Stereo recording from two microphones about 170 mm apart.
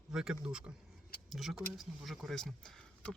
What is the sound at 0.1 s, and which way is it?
Speech, 5° right (ahead or behind).